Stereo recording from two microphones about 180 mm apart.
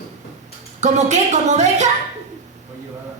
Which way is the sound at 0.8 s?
40° right (ahead or behind).